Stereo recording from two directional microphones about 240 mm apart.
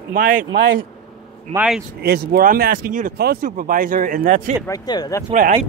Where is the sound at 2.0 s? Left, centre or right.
Right.